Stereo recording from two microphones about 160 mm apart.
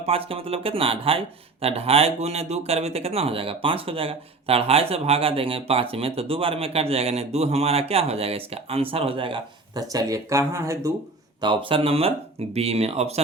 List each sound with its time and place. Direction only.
0.0 s speech: 35° right (ahead or behind); by 10.9 s 20° right (ahead or behind)
11.3 s speech: 30° right (ahead or behind)